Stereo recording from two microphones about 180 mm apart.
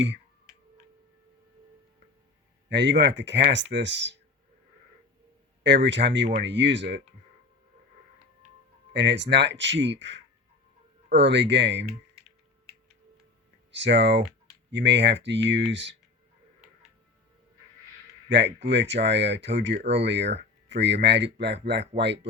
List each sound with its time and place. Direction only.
2.6 s speech: 80° right
5.6 s speech: 80° right
8.9 s speech: 75° right (ahead or behind)
13.7 s speech: 90° right
18.3 s speech: 75° right (ahead or behind)